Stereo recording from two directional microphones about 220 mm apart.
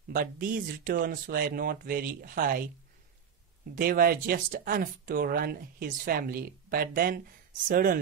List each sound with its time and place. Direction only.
0.1 s speech: 40° right (ahead or behind)
3.7 s speech: 40° right (ahead or behind)